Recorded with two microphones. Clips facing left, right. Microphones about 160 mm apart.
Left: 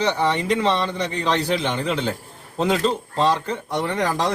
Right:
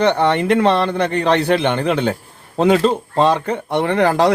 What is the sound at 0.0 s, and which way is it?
Speech, 60° right (ahead or behind).